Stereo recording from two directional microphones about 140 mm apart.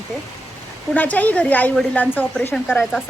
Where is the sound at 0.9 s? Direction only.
10° left (ahead or behind).